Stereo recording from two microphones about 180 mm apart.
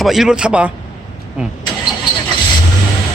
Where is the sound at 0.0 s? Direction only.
Centre (ahead or behind).